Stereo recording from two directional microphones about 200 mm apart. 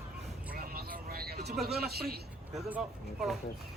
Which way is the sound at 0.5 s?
50° right (ahead or behind).